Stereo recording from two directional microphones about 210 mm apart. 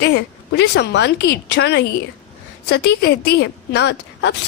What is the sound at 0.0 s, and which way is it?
Speech, 55° left (ahead or behind).